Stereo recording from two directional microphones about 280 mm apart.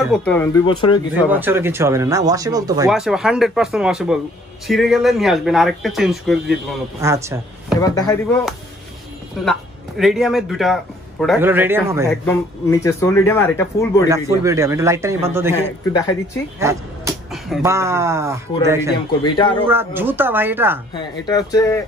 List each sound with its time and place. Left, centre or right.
0.0 s speech: centre
1.3 s speech: centre
2.9 s speech: centre
7.9 s speech: centre
9.4 s a man's voice: centre
12.1 s speech: centre
14.4 s speech: centre
15.8 s speech: centre
16.5 s dog: centre
17.6 s speech: centre
19.2 s speech: centre
19.6 s speech: centre
20.9 s speech: centre